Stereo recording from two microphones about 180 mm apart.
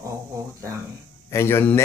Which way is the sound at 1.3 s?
15° left (ahead or behind).